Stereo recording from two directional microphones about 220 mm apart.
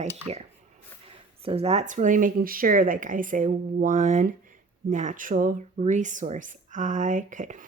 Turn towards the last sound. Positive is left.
turn(degrees=-35)  # may be behind; listen again after turning